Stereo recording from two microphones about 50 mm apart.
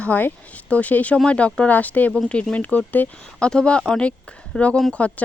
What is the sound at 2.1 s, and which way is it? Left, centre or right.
Speech, left.